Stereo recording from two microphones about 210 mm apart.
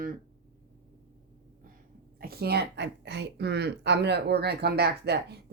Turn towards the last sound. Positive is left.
turn(degrees=-50)  # may be behind; listen again after turning